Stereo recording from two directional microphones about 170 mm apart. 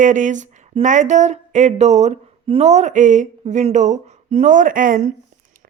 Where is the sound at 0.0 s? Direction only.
50° right (ahead or behind).